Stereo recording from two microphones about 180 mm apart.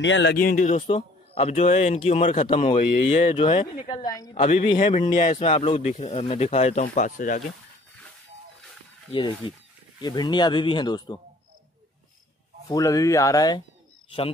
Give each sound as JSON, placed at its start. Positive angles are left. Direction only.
{"t": 0.0, "sound": "speech", "side_deg": 90}
{"t": 0.4, "sound": "a man's voice", "side_deg": 50}
{"t": 2.8, "sound": "speech", "side_deg": 50}
{"t": 3.2, "sound": "speech", "side_deg": 30}
{"t": 4.4, "sound": "a man's voice", "side_deg": 35}
{"t": 9.4, "sound": "speech", "side_deg": 30}
{"t": 12.6, "sound": "speech", "side_deg": 20}